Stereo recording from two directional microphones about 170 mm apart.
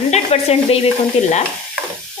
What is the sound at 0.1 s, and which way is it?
Stir, 40° left (ahead or behind).